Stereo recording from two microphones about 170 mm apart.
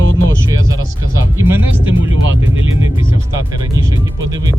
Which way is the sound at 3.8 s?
20° right (ahead or behind).